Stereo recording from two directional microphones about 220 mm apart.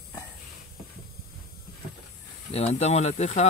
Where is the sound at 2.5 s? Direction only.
30° left (ahead or behind).